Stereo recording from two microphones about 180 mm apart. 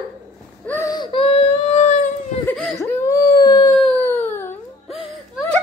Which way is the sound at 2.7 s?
15° left (ahead or behind).